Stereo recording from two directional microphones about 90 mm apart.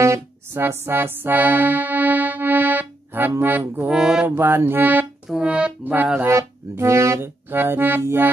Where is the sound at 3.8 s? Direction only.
5° right (ahead or behind).